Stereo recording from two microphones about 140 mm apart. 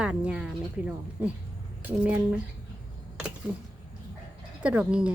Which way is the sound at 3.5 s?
20° right (ahead or behind).